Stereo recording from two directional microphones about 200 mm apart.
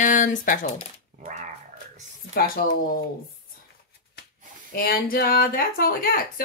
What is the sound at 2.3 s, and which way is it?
Speech, 45° left (ahead or behind).